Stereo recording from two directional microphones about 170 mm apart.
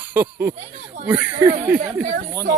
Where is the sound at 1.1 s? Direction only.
10° right (ahead or behind).